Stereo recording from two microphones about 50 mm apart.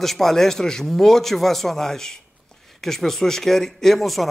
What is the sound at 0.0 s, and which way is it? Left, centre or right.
Speech, centre.